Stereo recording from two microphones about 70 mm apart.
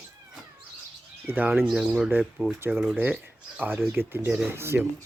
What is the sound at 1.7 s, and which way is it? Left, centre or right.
Speech, centre.